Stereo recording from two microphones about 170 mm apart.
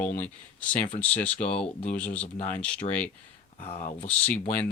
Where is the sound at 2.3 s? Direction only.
45° left (ahead or behind).